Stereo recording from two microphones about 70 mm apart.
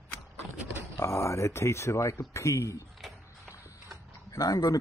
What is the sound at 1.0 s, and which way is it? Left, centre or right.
Speech, left.